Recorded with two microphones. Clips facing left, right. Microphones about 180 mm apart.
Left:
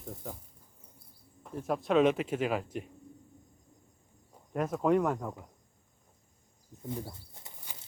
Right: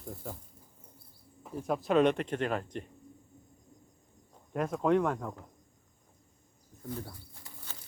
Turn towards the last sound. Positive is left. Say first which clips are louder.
# even
turn(degrees=20)  # may be behind; listen again after turning